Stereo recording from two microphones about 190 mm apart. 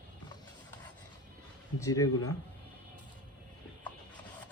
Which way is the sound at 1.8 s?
15° left (ahead or behind).